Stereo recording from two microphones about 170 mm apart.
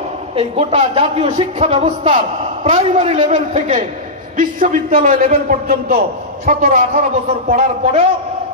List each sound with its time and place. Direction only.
0.4 s a man's voice: 35° right (ahead or behind); by 5.2 s 55° right (ahead or behind)
5.2 s a man's voice: 45° right (ahead or behind)